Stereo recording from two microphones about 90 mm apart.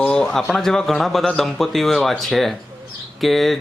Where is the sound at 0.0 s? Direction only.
10° left (ahead or behind).